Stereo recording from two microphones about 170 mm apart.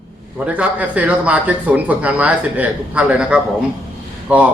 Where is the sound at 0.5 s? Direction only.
10° right (ahead or behind).